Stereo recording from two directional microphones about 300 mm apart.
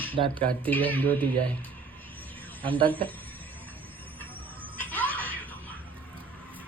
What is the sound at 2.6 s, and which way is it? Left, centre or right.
Speech, centre.